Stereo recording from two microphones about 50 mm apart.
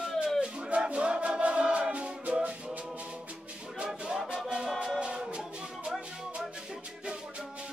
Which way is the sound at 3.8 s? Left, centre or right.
Centre.